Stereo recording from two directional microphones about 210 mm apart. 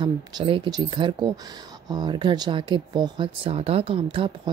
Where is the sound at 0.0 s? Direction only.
25° right (ahead or behind).